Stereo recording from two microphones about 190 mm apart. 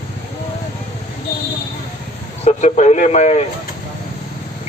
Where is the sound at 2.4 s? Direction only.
35° left (ahead or behind).